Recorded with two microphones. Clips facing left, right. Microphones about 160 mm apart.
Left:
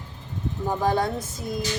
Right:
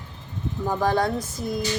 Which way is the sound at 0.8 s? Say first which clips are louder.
Right 1 dB; 25° left (ahead or behind).